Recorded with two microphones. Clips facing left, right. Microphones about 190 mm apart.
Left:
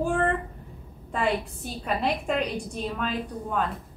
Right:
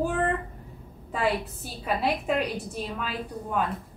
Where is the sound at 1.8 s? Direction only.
5° right (ahead or behind).